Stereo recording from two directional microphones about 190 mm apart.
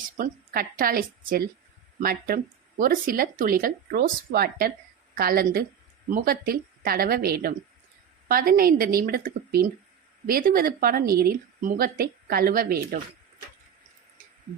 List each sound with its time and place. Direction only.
0.2 s speech: 50° right (ahead or behind)